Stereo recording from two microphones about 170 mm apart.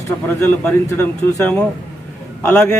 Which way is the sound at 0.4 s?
10° left (ahead or behind).